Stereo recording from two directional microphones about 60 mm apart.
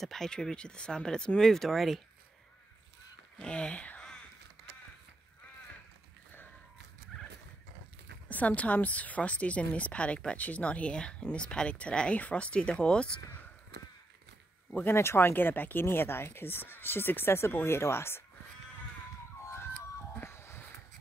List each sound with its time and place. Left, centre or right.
0.0 s speech: centre
3.3 s speech: centre
8.3 s speech: left
14.9 s speech: left
20.2 s a sound: left